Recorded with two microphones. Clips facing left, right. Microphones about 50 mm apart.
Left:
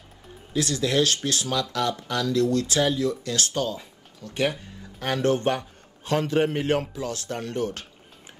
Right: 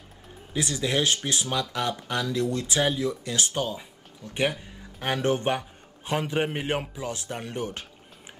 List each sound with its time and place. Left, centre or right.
0.5 s speech: centre